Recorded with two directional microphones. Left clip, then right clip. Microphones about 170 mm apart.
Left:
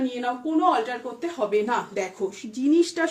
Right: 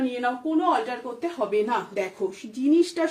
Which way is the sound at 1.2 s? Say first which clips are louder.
Left 1 dB; 30° left (ahead or behind).